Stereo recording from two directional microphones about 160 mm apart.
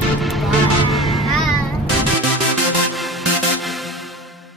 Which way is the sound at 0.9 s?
Centre (ahead or behind).